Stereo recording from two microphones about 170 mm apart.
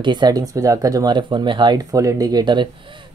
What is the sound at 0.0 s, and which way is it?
Speech, 25° right (ahead or behind).